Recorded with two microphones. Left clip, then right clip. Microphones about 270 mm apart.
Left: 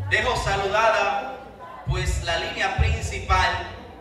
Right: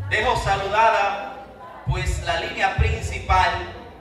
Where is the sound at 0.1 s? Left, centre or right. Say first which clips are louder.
Right 2 dB; right.